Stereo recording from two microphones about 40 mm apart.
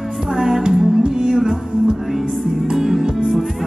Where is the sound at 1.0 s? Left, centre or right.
Right.